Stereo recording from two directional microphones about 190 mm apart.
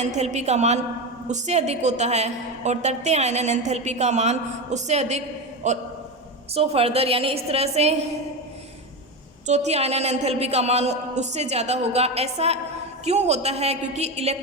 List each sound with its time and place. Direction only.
0.0 s a woman's voice: 35° right (ahead or behind)
9.5 s a woman's voice: 35° right (ahead or behind)